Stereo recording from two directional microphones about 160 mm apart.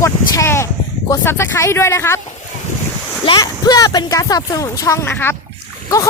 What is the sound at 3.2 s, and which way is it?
Speech, 30° left (ahead or behind).